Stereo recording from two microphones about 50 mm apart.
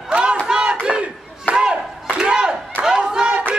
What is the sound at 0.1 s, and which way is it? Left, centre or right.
Battle cry, centre.